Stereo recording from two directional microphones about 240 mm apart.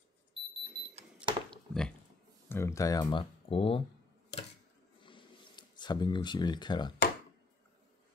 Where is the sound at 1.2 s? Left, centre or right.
Centre.